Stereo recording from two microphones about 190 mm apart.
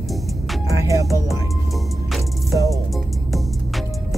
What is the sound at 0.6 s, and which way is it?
Music, 15° right (ahead or behind).